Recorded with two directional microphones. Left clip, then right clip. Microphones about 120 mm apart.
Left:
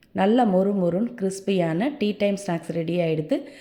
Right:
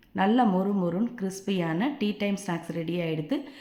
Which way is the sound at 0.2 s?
35° left (ahead or behind).